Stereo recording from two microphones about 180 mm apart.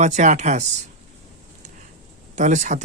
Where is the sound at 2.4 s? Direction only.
40° right (ahead or behind).